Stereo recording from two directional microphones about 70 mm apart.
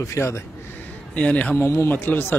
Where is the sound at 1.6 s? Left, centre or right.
Left.